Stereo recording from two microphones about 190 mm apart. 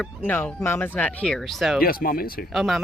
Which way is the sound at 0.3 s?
10° left (ahead or behind).